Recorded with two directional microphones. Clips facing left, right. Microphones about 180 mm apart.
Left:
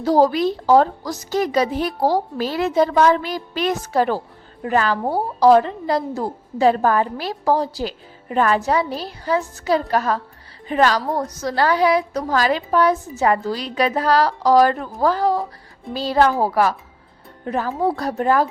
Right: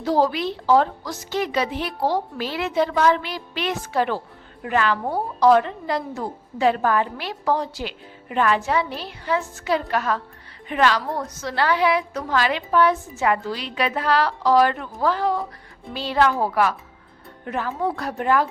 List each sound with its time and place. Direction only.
0.0 s a woman's voice: 40° left (ahead or behind)